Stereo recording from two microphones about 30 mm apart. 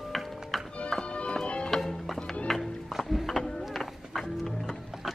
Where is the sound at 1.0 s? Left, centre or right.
Left.